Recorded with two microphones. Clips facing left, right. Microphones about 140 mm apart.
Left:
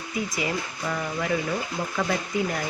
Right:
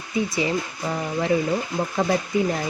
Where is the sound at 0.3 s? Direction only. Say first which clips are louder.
Right 4 dB; 30° right (ahead or behind).